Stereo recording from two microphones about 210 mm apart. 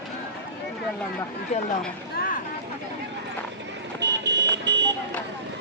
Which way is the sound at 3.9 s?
60° right (ahead or behind).